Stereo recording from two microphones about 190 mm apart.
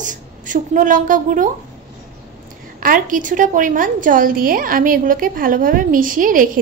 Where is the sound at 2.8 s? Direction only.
45° right (ahead or behind).